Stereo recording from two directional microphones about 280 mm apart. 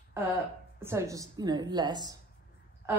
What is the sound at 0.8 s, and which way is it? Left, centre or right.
A woman's voice, centre.